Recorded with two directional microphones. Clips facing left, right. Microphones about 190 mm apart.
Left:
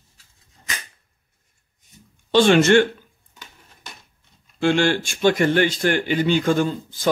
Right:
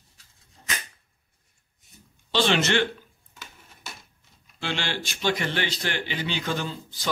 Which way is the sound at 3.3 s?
5° right (ahead or behind).